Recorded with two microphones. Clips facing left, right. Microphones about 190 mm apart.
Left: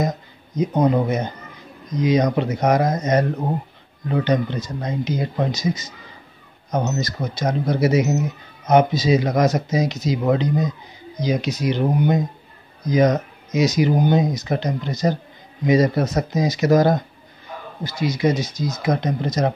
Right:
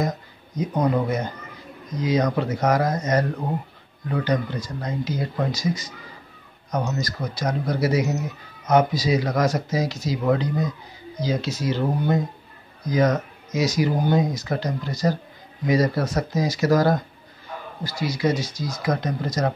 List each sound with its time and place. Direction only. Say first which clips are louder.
0.6 s speech: left 4 dB; 20° left (ahead or behind)